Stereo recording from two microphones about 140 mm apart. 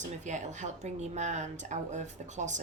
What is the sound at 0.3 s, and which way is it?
Speech, 60° right (ahead or behind).